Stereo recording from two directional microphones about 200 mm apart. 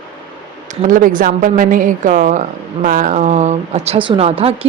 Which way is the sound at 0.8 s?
40° right (ahead or behind).